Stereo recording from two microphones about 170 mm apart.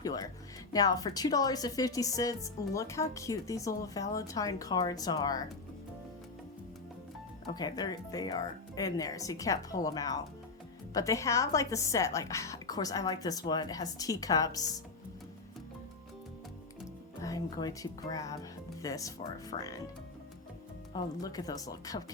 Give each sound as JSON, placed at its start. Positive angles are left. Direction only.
{"t": 0.0, "sound": "music", "side_deg": 20}
{"t": 0.7, "sound": "speech", "side_deg": 20}
{"t": 7.4, "sound": "speech", "side_deg": 25}
{"t": 17.2, "sound": "speech", "side_deg": 20}
{"t": 20.9, "sound": "speech", "side_deg": 20}